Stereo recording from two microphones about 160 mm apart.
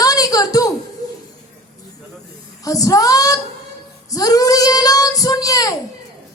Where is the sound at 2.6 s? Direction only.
20° left (ahead or behind).